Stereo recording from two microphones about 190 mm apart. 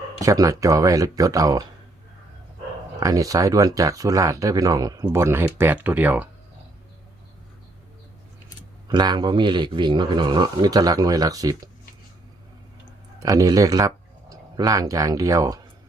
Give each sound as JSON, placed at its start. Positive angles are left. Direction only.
{"t": 0.2, "sound": "a man's voice", "side_deg": -15}
{"t": 3.0, "sound": "speech", "side_deg": -20}
{"t": 8.9, "sound": "a man's voice", "side_deg": -20}
{"t": 13.2, "sound": "speech", "side_deg": -20}